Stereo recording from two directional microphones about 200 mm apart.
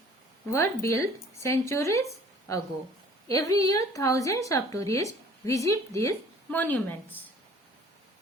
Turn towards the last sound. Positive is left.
turn(degrees=10)  # may be behind; listen again after turning